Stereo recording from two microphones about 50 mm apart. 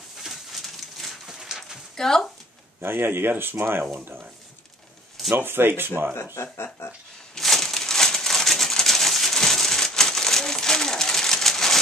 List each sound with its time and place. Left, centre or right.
0.2 s pigeon: centre
1.4 s a sound: centre
2.0 s speech: centre
2.8 s speech: right
5.3 s speech: right
6.3 s speech: left
7.3 s a sound: centre